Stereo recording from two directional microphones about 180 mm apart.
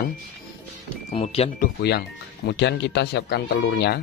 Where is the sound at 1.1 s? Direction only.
35° left (ahead or behind).